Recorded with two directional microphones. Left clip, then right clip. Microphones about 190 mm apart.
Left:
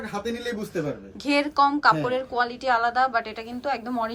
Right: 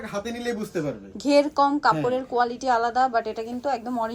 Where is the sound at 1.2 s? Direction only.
20° right (ahead or behind).